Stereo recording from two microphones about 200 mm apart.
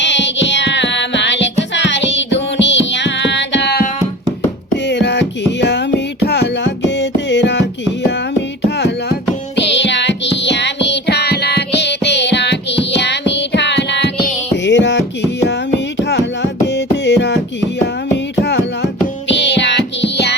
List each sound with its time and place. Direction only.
0.0 s music: 65° left (ahead or behind)
4.9 s music: 60° left (ahead or behind)
18.4 s music: 55° left (ahead or behind)